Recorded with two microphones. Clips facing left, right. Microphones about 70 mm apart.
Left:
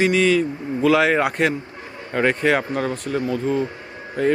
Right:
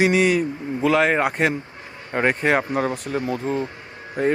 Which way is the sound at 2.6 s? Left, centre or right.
Right.